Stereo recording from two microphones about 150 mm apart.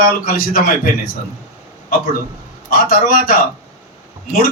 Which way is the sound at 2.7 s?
70° left (ahead or behind).